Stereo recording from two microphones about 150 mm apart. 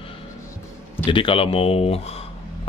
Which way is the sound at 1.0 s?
35° left (ahead or behind).